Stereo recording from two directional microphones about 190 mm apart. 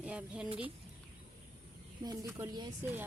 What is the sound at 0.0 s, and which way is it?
Speech, 5° right (ahead or behind).